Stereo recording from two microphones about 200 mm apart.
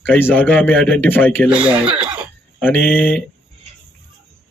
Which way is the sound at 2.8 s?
10° left (ahead or behind).